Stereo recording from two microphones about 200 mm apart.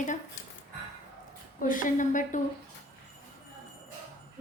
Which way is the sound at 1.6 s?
40° left (ahead or behind).